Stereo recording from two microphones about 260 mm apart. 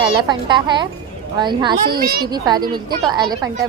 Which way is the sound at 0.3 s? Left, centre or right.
Centre.